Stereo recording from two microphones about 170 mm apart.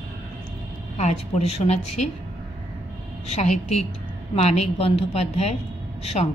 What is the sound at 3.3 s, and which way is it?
A woman's voice, 40° left (ahead or behind).